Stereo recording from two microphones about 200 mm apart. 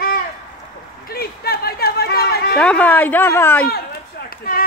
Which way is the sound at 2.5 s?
5° left (ahead or behind).